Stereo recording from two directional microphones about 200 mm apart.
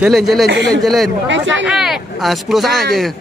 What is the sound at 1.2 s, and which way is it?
Speech, 65° right (ahead or behind).